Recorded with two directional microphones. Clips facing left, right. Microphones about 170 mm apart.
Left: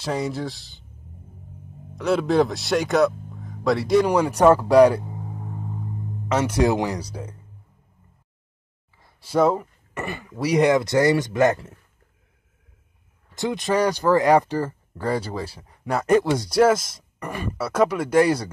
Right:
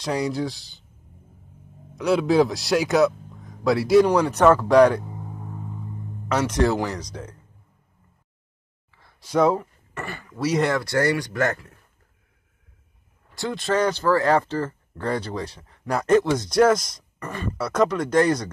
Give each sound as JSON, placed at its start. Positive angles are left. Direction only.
{"t": 0.0, "sound": "speech", "side_deg": 0}
{"t": 2.0, "sound": "speech", "side_deg": 0}
{"t": 4.1, "sound": "speech", "side_deg": 10}
{"t": 6.3, "sound": "speech", "side_deg": 10}
{"t": 9.2, "sound": "speech", "side_deg": 5}
{"t": 9.9, "sound": "speech", "side_deg": 20}
{"t": 13.3, "sound": "speech", "side_deg": 20}